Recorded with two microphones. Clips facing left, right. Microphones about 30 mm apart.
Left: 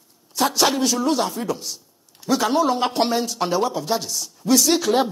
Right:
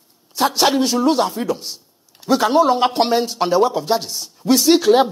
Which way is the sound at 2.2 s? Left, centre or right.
Right.